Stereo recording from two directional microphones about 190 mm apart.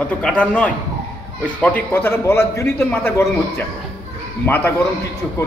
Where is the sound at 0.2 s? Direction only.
5° left (ahead or behind).